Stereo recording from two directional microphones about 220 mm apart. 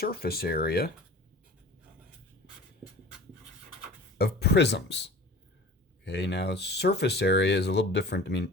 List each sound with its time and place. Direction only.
0.0 s speech: 45° left (ahead or behind)
4.2 s speech: 45° left (ahead or behind)